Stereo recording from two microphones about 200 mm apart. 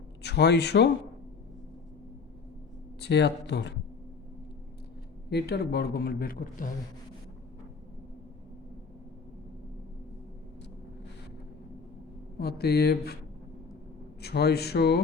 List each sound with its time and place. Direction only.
0.2 s speech: 55° left (ahead or behind)
3.0 s speech: 55° left (ahead or behind)
5.3 s a man's voice: 55° left (ahead or behind)
12.4 s a man's voice: 50° left (ahead or behind)
14.2 s a man's voice: 55° left (ahead or behind)